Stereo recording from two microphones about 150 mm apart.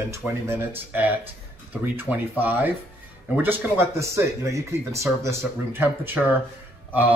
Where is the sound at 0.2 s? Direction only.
15° right (ahead or behind).